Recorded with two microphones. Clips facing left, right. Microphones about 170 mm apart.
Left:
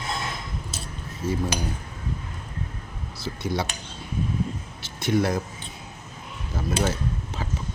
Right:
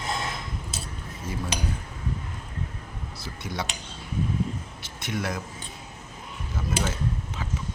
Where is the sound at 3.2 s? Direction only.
30° left (ahead or behind).